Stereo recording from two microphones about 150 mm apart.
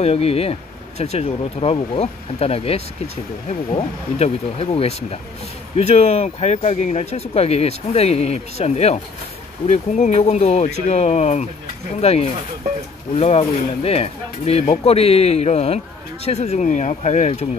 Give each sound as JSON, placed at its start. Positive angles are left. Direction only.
{"t": 0.0, "sound": "speech", "side_deg": 40}